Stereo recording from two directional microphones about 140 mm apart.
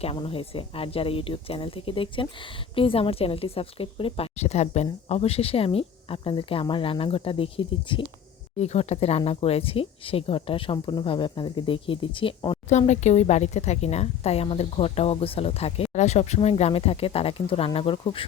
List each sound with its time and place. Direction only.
0.0 s a woman's voice: 45° left (ahead or behind)
8.5 s speech: 50° left (ahead or behind)
12.6 s a woman's voice: 55° left (ahead or behind); by 18.3 s 40° left (ahead or behind)